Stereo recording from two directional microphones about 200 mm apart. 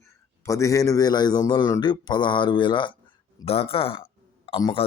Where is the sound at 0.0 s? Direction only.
15° left (ahead or behind).